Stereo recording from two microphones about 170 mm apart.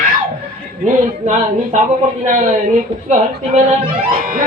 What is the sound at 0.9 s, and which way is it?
A woman's voice, 45° right (ahead or behind).